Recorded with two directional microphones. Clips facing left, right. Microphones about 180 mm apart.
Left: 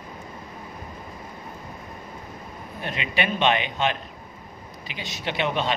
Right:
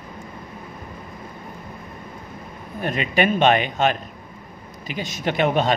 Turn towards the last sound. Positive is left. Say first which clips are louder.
# right 6 dB
turn(degrees=-45)  # may be behind; listen again after turning